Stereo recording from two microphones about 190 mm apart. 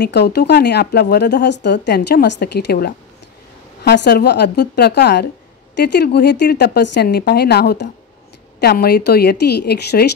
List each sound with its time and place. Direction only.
0.0 s speech: 60° left (ahead or behind)